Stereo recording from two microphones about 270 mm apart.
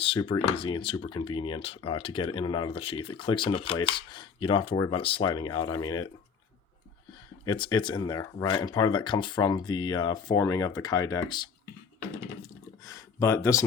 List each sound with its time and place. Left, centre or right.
0.0 s speech: centre
7.4 s speech: centre
12.8 s speech: centre